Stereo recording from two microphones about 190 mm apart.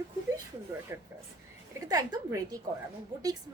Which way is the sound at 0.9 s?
15° right (ahead or behind).